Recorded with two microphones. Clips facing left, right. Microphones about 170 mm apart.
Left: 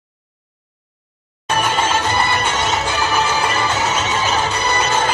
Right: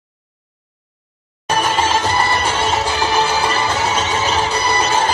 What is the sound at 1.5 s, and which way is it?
Music, 35° right (ahead or behind).